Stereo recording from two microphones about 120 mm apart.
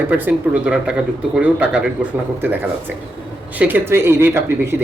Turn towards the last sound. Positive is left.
turn(degrees=-20)  # may be behind; listen again after turning